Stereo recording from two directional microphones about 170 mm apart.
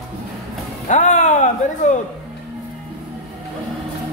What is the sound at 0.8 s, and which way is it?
Speech, 45° left (ahead or behind).